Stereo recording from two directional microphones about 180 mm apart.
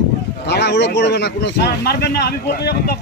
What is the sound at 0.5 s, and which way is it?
Speech, 70° left (ahead or behind).